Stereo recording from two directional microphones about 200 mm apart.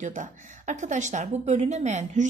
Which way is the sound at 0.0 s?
35° right (ahead or behind).